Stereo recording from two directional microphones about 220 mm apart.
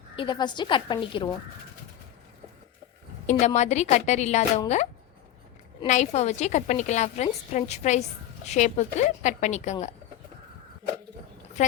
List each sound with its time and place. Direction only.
0.2 s a woman's voice: 20° left (ahead or behind)
3.2 s a woman's voice: 30° left (ahead or behind)
5.8 s a woman's voice: 30° left (ahead or behind)